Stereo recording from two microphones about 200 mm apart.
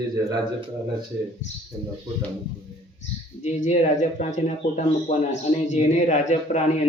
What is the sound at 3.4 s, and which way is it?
Speech, 35° left (ahead or behind).